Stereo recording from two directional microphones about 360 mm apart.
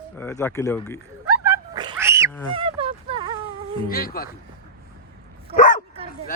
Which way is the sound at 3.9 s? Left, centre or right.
Left.